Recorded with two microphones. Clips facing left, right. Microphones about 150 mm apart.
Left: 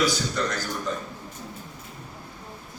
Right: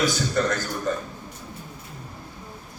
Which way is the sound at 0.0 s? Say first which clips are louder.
Right 2 dB; 50° right (ahead or behind).